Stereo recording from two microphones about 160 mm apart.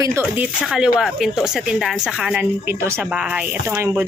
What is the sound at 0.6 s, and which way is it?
A woman's voice, centre (ahead or behind).